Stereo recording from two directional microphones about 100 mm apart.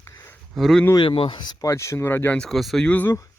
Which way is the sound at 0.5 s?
5° left (ahead or behind).